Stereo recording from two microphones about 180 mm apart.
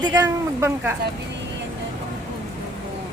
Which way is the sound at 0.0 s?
20° right (ahead or behind).